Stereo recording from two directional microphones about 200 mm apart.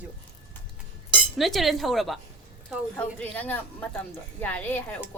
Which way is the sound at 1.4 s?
Centre (ahead or behind).